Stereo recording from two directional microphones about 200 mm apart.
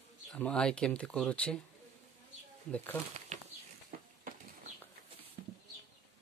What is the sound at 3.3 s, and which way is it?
Bird flight, 35° right (ahead or behind).